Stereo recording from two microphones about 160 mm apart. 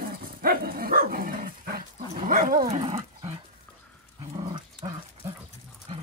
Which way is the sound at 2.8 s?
30° right (ahead or behind).